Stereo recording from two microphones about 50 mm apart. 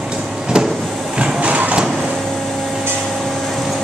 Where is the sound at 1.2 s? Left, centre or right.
Right.